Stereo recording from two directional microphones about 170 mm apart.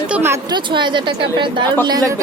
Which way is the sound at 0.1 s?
15° right (ahead or behind).